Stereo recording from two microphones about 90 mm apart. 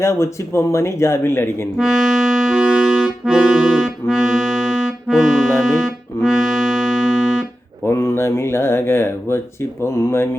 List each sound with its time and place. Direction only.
0.0 s speech: 30° left (ahead or behind)
1.8 s music: 5° right (ahead or behind)
7.9 s speech: 30° left (ahead or behind)